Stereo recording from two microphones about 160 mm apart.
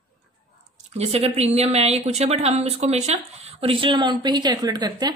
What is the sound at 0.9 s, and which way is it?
Speech, 40° right (ahead or behind).